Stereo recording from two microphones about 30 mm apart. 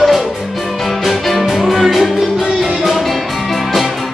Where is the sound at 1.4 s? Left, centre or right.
Centre.